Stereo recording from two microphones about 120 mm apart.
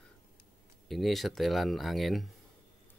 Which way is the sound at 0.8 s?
Centre (ahead or behind).